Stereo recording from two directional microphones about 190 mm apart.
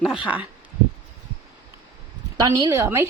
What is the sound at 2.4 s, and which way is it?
Speech, 20° right (ahead or behind).